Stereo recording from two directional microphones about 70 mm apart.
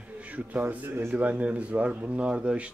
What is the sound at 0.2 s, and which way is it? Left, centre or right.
Speech, right.